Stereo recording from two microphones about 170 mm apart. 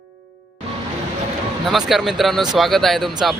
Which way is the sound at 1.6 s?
Centre (ahead or behind).